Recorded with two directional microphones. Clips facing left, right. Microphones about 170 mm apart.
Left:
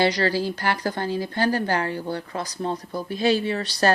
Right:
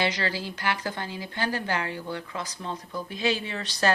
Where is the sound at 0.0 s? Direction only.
40° left (ahead or behind).